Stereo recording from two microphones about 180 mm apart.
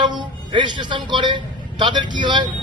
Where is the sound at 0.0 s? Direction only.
25° right (ahead or behind).